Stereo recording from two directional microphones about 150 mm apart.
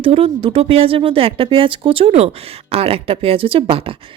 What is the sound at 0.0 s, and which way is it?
Speech, 40° right (ahead or behind).